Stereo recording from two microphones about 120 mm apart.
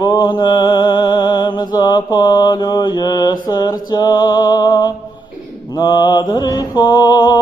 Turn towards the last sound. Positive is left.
turn(degrees=35)  # may be behind; listen again after turning